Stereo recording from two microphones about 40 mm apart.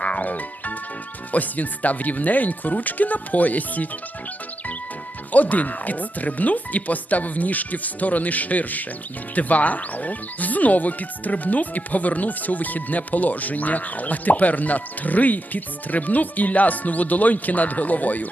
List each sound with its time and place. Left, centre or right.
0.0 s music: left
1.3 s speech: left
5.3 s speech: left